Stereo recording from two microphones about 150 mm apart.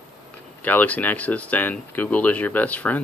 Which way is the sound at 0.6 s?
10° left (ahead or behind).